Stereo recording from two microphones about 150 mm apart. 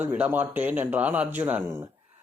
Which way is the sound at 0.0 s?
10° right (ahead or behind).